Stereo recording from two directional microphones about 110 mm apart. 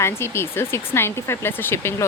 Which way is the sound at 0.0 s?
25° left (ahead or behind).